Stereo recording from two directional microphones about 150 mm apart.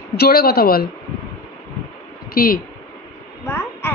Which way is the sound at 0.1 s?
90° left.